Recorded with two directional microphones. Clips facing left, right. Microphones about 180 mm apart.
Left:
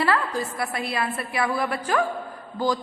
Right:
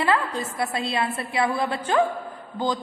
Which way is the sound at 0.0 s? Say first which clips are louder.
Even; 20° right (ahead or behind).